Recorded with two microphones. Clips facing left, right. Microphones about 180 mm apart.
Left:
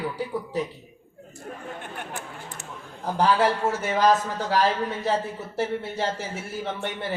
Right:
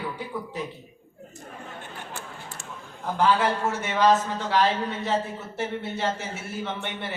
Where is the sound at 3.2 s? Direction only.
35° left (ahead or behind).